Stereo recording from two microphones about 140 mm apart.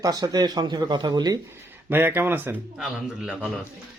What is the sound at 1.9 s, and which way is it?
A man's voice, 15° right (ahead or behind).